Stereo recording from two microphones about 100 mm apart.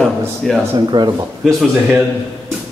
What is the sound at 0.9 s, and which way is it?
Speech, 40° right (ahead or behind).